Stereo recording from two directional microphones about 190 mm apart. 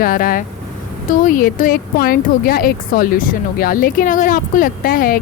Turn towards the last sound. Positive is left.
turn(degrees=50)  # may be behind; listen again after turning